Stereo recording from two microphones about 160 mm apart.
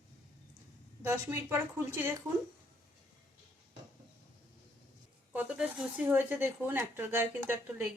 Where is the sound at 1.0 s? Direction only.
15° right (ahead or behind).